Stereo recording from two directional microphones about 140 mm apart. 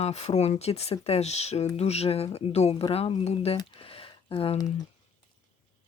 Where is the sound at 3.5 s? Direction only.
40° left (ahead or behind).